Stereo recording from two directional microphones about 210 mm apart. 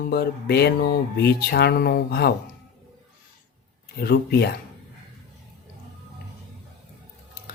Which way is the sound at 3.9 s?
50° left (ahead or behind).